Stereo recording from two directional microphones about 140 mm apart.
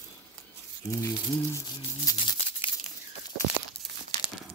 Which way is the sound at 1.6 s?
25° left (ahead or behind).